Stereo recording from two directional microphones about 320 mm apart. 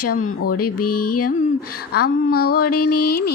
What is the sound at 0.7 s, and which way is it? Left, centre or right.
Music, left.